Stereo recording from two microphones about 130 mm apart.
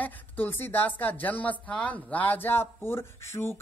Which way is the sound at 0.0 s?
15° left (ahead or behind).